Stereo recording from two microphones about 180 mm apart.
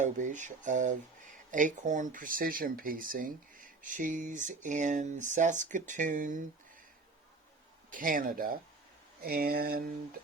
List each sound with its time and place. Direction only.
0.0 s speech: 45° right (ahead or behind)
7.9 s speech: 50° right (ahead or behind)
9.2 s a sound: 55° right (ahead or behind)